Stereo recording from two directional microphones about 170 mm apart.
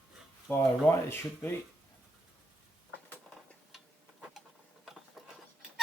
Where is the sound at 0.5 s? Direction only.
15° left (ahead or behind).